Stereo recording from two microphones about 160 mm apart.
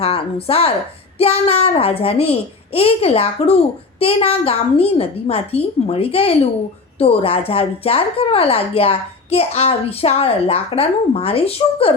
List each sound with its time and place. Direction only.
0.0 s speech: 35° left (ahead or behind)